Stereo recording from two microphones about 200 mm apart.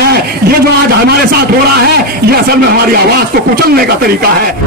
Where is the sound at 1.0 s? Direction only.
50° right (ahead or behind).